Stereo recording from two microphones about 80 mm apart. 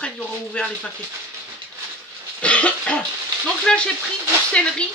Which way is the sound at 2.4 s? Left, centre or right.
Centre.